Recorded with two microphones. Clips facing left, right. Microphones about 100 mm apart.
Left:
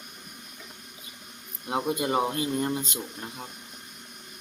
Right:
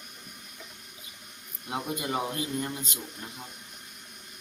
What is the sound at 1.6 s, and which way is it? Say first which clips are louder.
Speech: left 5 dB; 30° left (ahead or behind).